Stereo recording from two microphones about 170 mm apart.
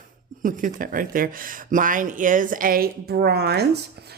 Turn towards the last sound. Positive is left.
turn(degrees=-75)  # may be behind; listen again after turning